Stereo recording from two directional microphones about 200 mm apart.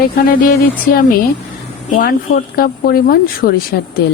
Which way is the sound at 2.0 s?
45° left (ahead or behind).